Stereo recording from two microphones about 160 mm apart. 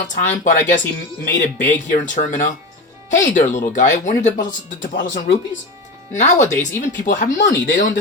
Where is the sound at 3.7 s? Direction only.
50° left (ahead or behind).